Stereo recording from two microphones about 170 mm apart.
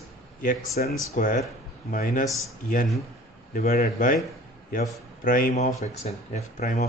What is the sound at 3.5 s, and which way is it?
Speech, 60° left (ahead or behind).